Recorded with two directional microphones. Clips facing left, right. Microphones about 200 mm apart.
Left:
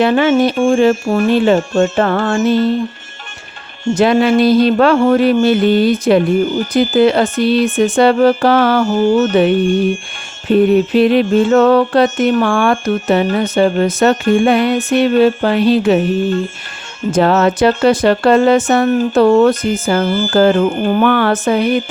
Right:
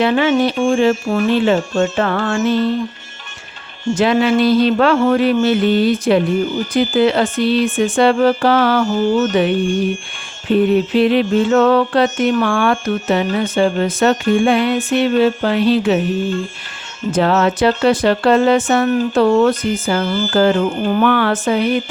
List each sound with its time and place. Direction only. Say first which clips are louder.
0.0 s speech: left 3 dB; 45° left (ahead or behind)
3.9 s speech: left 3 dB; 45° left (ahead or behind)
10.5 s speech: left 3 dB; 45° left (ahead or behind)
17.1 s speech: left 3 dB; 45° left (ahead or behind)